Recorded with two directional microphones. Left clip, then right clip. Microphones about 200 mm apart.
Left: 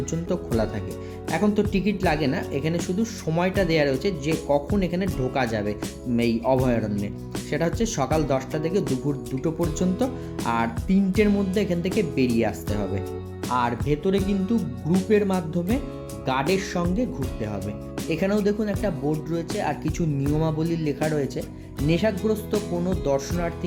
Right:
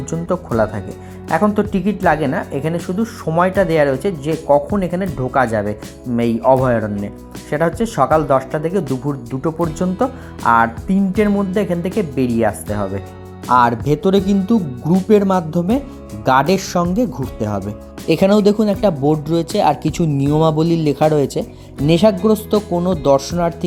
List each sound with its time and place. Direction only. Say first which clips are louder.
0.1 s speech: right 10 dB; 15° right (ahead or behind)
4.3 s speech: right 10 dB; centre (ahead or behind)
13.5 s speech: right 11 dB; 35° right (ahead or behind)